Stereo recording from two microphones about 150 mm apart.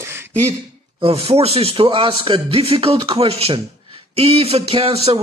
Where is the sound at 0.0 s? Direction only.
15° right (ahead or behind).